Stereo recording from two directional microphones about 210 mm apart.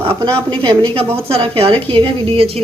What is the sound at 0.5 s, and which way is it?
A woman's voice, 20° right (ahead or behind).